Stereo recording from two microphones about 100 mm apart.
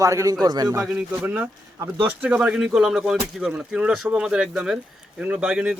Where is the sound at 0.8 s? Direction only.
10° right (ahead or behind).